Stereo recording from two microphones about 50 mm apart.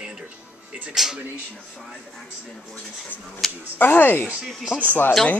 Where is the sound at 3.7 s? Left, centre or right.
Left.